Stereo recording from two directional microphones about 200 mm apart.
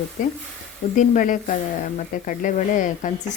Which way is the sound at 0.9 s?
40° left (ahead or behind).